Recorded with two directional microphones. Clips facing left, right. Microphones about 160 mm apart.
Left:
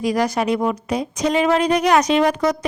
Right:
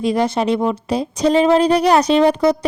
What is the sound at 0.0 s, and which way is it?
Speech, 25° right (ahead or behind).